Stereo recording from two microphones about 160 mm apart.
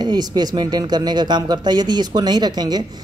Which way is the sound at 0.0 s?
25° right (ahead or behind).